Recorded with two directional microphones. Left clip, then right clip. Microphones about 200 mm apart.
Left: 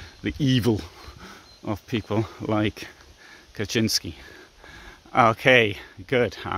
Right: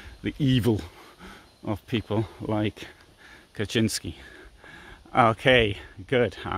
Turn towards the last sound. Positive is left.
turn(degrees=5)  # may be behind; listen again after turning